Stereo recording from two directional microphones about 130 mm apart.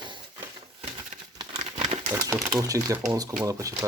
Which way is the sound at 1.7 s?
60° right (ahead or behind).